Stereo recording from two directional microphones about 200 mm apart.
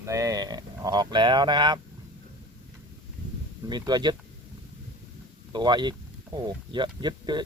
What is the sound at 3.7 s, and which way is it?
Speech, 20° right (ahead or behind).